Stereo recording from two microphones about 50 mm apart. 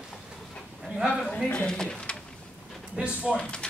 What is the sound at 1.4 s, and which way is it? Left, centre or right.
Speech, centre.